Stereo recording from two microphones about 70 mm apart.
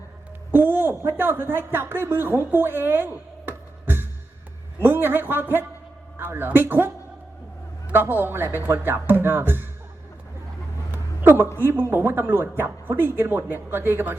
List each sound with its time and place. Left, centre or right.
0.5 s speech: right
10.9 s a sound: right
11.5 s speech: right